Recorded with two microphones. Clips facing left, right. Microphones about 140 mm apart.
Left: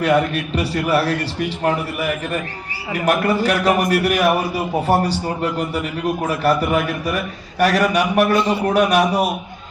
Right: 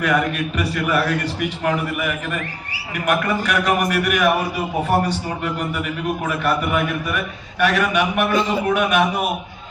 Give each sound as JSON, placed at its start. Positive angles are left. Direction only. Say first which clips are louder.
{"t": 0.0, "sound": "a man's voice", "louder": "left 3 dB", "side_deg": 30}